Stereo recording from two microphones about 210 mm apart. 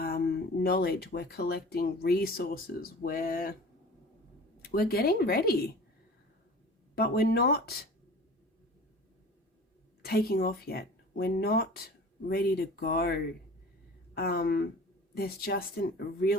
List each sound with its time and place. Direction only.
0.0 s speech: 45° left (ahead or behind)
4.6 s speech: 45° left (ahead or behind)
6.9 s speech: 50° left (ahead or behind)
10.0 s speech: 45° left (ahead or behind)
14.2 s speech: 45° left (ahead or behind)